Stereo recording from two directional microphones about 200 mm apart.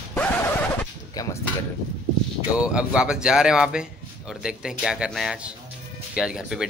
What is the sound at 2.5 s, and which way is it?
A man's voice, 5° right (ahead or behind).